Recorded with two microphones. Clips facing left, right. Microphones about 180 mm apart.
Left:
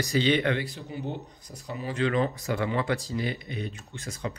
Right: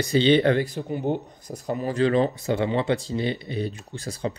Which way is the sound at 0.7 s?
55° right (ahead or behind).